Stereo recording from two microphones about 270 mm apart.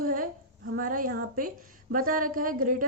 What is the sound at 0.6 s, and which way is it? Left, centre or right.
A woman's voice, right.